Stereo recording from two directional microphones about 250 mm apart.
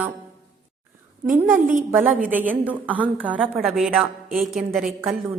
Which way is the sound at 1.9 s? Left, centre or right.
Centre.